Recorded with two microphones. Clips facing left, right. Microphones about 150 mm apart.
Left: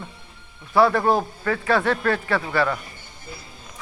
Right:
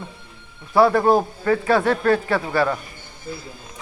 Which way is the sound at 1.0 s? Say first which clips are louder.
Right 4 dB; 10° right (ahead or behind).